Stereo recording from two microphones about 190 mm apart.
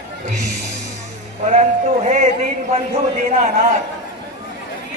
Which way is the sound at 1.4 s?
35° right (ahead or behind).